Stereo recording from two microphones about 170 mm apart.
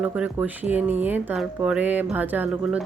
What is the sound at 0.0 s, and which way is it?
Speech, 10° right (ahead or behind).